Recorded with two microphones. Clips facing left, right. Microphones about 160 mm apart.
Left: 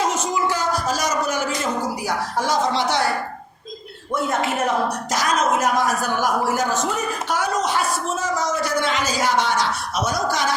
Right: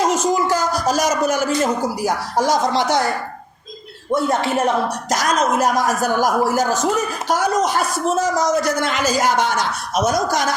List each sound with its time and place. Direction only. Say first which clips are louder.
0.0 s a sound: right 4 dB; 40° right (ahead or behind)
2.0 s speech: right 6 dB; 40° right (ahead or behind)
4.1 s a man's voice: right 4 dB; 30° right (ahead or behind)